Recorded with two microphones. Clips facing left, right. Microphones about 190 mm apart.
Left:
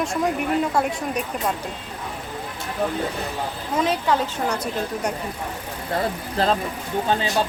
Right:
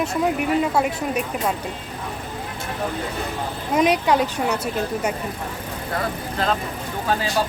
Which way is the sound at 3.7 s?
15° right (ahead or behind).